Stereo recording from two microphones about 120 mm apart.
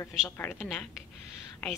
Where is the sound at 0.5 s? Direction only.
Centre (ahead or behind).